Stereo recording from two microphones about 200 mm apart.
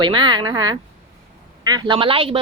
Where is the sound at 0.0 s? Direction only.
20° right (ahead or behind).